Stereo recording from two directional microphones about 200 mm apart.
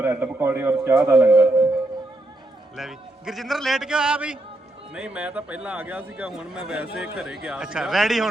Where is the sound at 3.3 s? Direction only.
Centre (ahead or behind).